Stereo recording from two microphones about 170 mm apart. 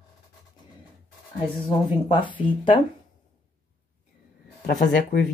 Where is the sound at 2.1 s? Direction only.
30° left (ahead or behind).